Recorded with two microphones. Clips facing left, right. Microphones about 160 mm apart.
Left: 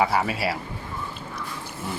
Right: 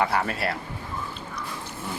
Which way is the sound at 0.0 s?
5° left (ahead or behind).